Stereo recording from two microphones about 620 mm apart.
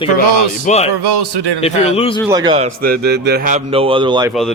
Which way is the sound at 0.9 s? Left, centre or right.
Right.